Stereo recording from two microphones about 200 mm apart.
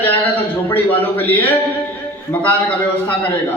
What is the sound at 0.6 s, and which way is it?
Speech, 10° left (ahead or behind).